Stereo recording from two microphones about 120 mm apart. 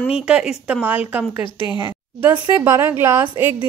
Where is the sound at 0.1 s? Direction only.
5° right (ahead or behind).